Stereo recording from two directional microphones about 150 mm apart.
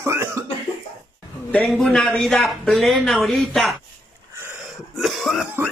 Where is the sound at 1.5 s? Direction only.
Centre (ahead or behind).